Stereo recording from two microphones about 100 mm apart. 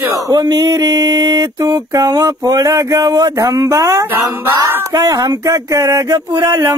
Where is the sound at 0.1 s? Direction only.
40° right (ahead or behind).